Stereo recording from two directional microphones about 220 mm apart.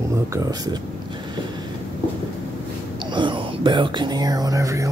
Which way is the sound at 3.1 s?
20° right (ahead or behind).